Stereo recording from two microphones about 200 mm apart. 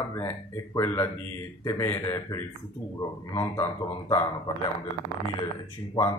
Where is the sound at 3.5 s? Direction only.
15° left (ahead or behind).